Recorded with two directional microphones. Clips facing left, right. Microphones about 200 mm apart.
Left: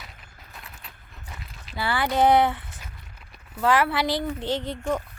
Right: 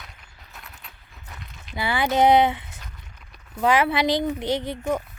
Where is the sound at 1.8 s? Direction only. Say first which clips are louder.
Right 2 dB; 20° right (ahead or behind).